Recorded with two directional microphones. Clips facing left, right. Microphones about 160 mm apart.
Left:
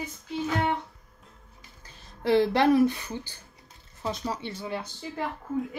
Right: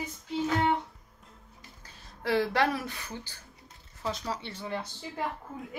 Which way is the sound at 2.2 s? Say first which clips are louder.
Left 6 dB; 25° left (ahead or behind).